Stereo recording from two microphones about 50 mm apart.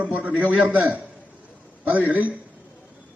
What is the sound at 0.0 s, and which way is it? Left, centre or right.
A man's voice, right.